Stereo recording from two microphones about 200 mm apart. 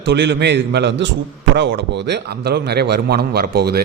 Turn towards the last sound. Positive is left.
turn(degrees=-50)  # may be behind; listen again after turning